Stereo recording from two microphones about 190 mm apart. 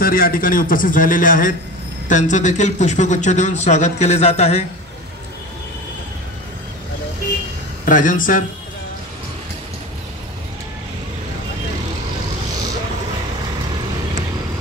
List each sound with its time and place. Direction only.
0.0 s a man's voice: 50° left (ahead or behind); by 4.6 s 35° left (ahead or behind)
7.8 s a man's voice: 45° left (ahead or behind)